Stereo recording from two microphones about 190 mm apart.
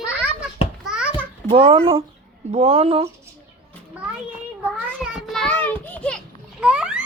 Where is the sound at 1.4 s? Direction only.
30° right (ahead or behind).